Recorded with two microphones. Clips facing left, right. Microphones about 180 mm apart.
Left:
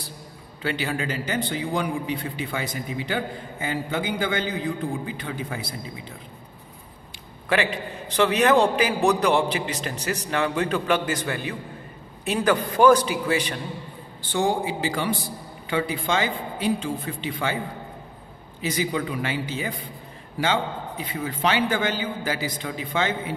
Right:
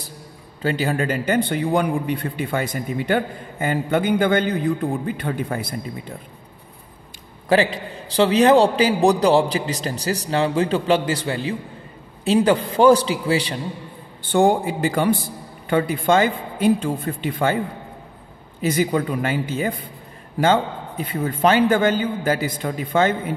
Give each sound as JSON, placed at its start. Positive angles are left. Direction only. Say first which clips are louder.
{"t": 0.6, "sound": "a man's voice", "louder": "right 6 dB", "side_deg": -40}
{"t": 8.1, "sound": "a man's voice", "louder": "right 5 dB", "side_deg": -30}
{"t": 14.3, "sound": "a man's voice", "louder": "right 6 dB", "side_deg": -55}
{"t": 18.6, "sound": "a man's voice", "louder": "right 6 dB", "side_deg": -50}
{"t": 21.0, "sound": "a man's voice", "louder": "right 7 dB", "side_deg": -50}